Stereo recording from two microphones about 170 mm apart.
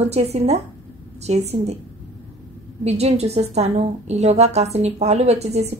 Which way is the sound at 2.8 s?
40° right (ahead or behind).